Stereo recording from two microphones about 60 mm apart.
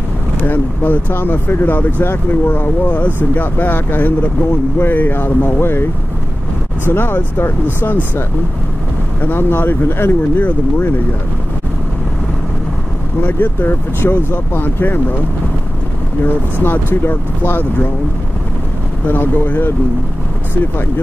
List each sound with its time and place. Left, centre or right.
0.4 s speech: left
9.2 s speech: left
13.2 s speech: left
16.6 s speech: left
19.0 s speech: left